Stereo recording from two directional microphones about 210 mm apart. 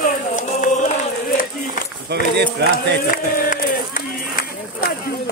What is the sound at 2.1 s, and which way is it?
Speech, 50° right (ahead or behind).